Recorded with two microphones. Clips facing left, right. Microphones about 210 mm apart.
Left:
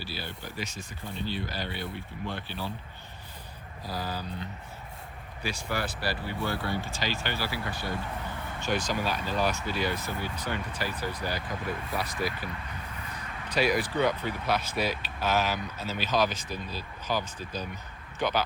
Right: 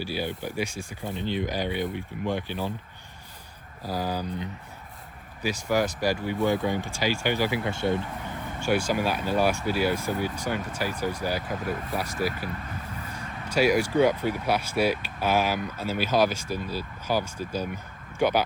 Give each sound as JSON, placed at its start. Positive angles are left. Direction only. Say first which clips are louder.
{"t": 0.0, "sound": "speech", "louder": "right 9 dB", "side_deg": -15}
{"t": 3.8, "sound": "speech", "louder": "right 6 dB", "side_deg": -10}
{"t": 8.5, "sound": "speech", "louder": "right 5 dB", "side_deg": -10}
{"t": 13.1, "sound": "speech", "louder": "right 4 dB", "side_deg": -10}